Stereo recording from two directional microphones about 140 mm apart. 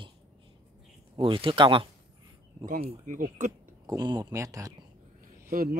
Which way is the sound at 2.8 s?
65° right (ahead or behind).